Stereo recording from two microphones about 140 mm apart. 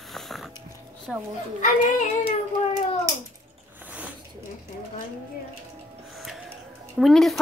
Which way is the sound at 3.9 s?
10° right (ahead or behind).